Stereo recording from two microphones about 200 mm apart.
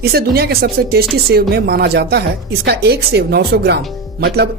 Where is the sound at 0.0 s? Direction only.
50° right (ahead or behind).